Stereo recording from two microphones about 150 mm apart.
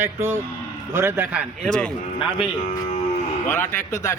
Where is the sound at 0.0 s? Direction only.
15° right (ahead or behind).